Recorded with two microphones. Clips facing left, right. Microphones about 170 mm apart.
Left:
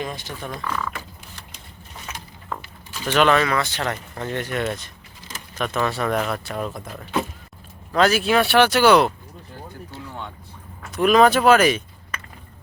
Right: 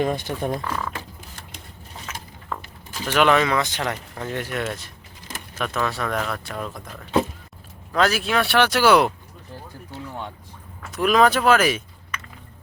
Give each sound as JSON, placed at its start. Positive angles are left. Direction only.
{"t": 0.0, "sound": "speech", "side_deg": -55}
{"t": 0.6, "sound": "speech", "side_deg": -30}
{"t": 3.1, "sound": "speech", "side_deg": -10}
{"t": 10.9, "sound": "speech", "side_deg": 0}